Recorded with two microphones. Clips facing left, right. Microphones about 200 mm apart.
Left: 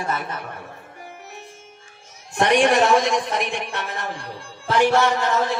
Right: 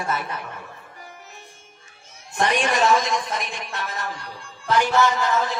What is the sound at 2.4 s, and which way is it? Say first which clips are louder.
A man's voice: left 4 dB; 65° left (ahead or behind).